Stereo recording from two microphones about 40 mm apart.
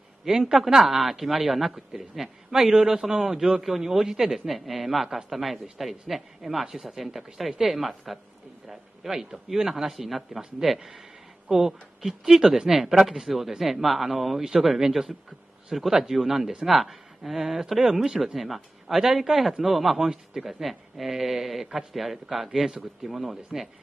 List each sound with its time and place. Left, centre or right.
0.2 s a woman's voice: centre
10.8 s a sound: centre
12.0 s a woman's voice: centre
20.0 s a woman's voice: centre
20.6 s speech: centre